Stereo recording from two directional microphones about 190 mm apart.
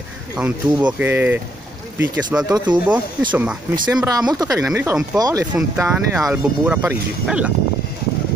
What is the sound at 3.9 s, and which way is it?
Speech, 20° right (ahead or behind).